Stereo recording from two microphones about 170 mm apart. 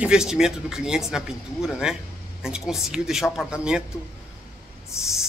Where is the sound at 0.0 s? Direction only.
5° right (ahead or behind).